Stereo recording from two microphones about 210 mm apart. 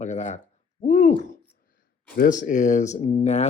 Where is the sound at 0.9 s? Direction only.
35° left (ahead or behind).